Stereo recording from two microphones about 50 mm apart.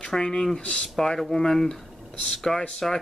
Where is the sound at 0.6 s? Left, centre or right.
Left.